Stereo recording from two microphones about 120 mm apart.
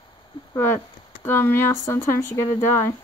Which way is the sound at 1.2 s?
20° left (ahead or behind).